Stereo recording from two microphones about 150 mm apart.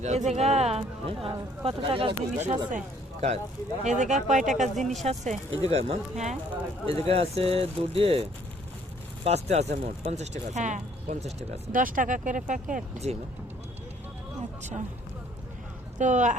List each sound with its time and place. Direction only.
0.0 s speech: 50° right (ahead or behind)
11.8 s speech: 65° right (ahead or behind)
14.6 s speech: 50° right (ahead or behind)
16.0 s speech: 55° right (ahead or behind)